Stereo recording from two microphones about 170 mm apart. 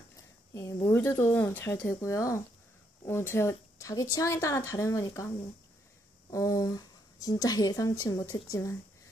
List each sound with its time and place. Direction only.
0.8 s a woman's voice: 10° left (ahead or behind)
6.3 s speech: 20° left (ahead or behind)